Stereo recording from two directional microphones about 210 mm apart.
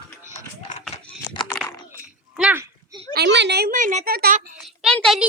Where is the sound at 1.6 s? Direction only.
15° left (ahead or behind).